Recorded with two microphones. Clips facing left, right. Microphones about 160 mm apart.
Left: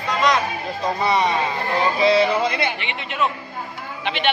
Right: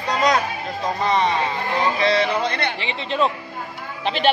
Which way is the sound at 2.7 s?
30° right (ahead or behind).